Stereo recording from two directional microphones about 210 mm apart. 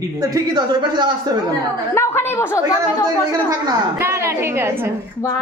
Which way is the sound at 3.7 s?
15° right (ahead or behind).